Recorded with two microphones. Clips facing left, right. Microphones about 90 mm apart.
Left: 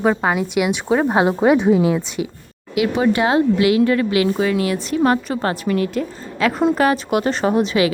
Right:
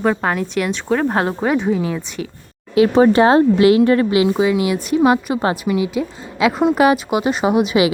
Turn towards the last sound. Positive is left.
turn(degrees=-15)  # may be behind; listen again after turning